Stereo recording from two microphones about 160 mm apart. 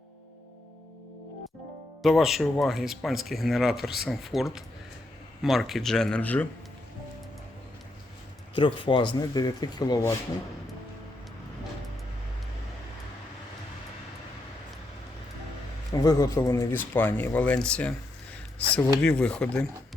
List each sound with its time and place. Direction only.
2.0 s speech: centre (ahead or behind)
8.5 s speech: 30° left (ahead or behind)
15.9 s speech: 20° left (ahead or behind); by 19.6 s 5° left (ahead or behind)